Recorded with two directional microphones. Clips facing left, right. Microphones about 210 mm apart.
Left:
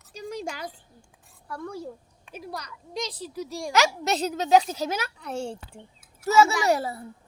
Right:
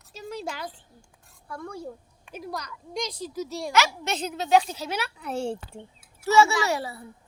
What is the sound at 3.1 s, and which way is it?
Speech, 5° left (ahead or behind).